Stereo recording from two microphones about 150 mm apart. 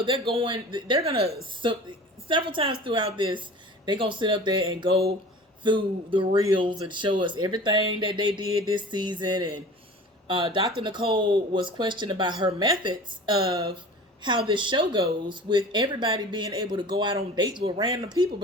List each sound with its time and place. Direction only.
0.3 s speech: 35° right (ahead or behind)